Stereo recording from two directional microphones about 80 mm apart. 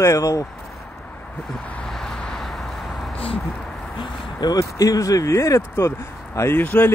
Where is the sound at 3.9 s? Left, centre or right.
Left.